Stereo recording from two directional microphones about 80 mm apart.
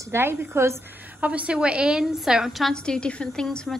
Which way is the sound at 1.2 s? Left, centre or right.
Centre.